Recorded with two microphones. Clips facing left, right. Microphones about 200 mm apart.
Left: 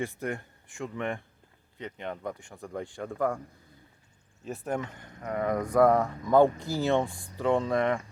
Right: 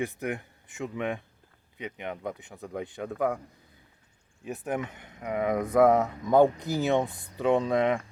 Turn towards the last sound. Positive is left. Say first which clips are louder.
# right 2 dB
turn(degrees=-20)  # may be behind; listen again after turning